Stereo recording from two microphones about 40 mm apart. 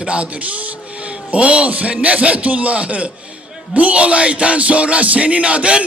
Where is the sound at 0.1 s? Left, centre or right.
Right.